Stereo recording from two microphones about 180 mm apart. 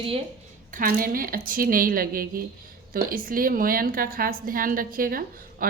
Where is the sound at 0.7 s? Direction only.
50° right (ahead or behind).